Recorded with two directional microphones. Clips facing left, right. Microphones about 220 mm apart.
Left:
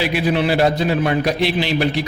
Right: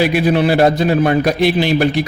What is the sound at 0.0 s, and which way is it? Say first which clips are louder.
A man's voice: right 5 dB; 50° right (ahead or behind).